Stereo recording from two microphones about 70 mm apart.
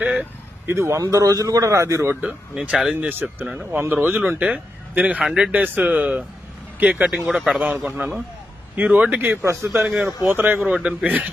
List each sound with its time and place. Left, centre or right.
0.7 s a man's voice: right
2.2 s a man's voice: centre
3.0 s a man's voice: right
4.4 s a man's voice: centre
5.5 s a man's voice: right
7.1 s speech: centre
7.5 s a man's voice: right
9.4 s a man's voice: right
10.2 s a man's voice: right
10.7 s a man's voice: centre